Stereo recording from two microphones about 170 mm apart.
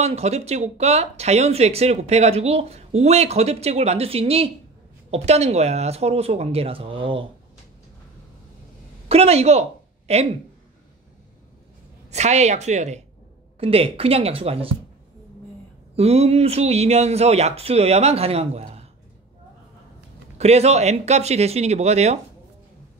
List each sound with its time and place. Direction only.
0.0 s speech: 40° right (ahead or behind)
9.1 s speech: 40° right (ahead or behind)
12.1 s speech: 40° right (ahead or behind)
16.0 s speech: 35° right (ahead or behind)
20.3 s speech: 40° right (ahead or behind)